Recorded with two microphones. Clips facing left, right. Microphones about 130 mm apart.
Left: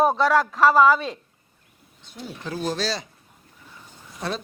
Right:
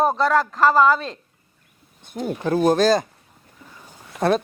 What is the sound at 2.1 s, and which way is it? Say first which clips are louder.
Speech: right 10 dB; 55° right (ahead or behind).